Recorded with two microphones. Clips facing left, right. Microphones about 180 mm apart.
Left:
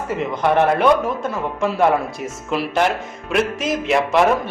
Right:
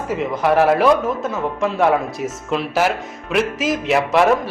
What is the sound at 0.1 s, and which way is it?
Speech, centre (ahead or behind).